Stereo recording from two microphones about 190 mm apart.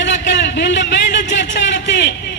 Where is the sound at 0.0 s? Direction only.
70° left (ahead or behind).